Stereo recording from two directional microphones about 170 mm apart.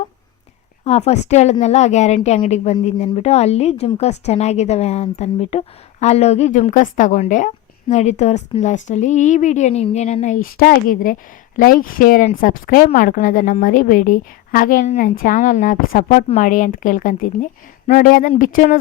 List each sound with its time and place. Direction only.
0.9 s a woman's voice: 40° left (ahead or behind)